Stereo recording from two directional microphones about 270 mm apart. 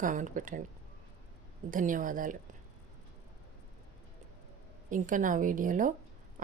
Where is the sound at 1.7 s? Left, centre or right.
Right.